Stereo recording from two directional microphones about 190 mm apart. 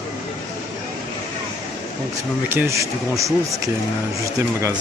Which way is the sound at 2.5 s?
15° right (ahead or behind).